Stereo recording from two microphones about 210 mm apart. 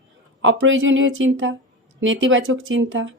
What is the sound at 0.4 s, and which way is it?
Speech, 65° right (ahead or behind).